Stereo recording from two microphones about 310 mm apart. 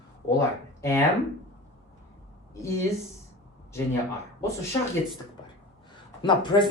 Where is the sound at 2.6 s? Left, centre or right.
Centre.